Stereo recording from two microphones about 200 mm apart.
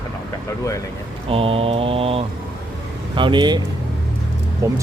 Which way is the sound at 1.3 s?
30° right (ahead or behind).